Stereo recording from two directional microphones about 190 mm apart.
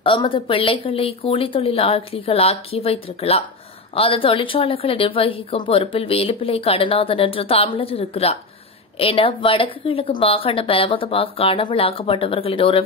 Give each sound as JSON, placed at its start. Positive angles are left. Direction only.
{"t": 0.0, "sound": "speech", "side_deg": 25}